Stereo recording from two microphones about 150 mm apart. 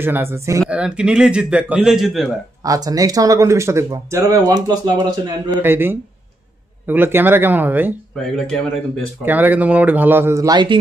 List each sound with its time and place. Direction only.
0.0 s speech: 15° right (ahead or behind)
0.7 s speech: 5° right (ahead or behind)
2.6 s speech: 25° right (ahead or behind)
8.2 s speech: centre (ahead or behind)
9.2 s speech: 10° right (ahead or behind); by 10.8 s 30° right (ahead or behind)